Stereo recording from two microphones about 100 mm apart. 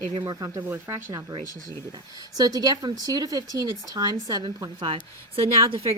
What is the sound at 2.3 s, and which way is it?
Speech, 40° right (ahead or behind).